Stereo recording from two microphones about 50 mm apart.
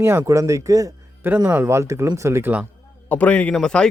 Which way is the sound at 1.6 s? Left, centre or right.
Right.